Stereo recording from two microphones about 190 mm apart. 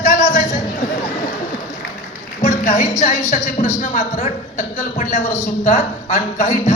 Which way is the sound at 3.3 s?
40° left (ahead or behind).